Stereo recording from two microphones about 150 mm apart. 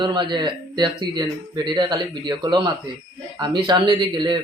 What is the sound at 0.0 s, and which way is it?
Speech, 30° right (ahead or behind).